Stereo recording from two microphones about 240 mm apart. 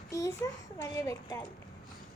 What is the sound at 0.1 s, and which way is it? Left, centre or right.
A woman's voice, centre.